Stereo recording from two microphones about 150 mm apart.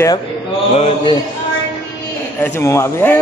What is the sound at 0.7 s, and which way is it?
Speech, 45° left (ahead or behind).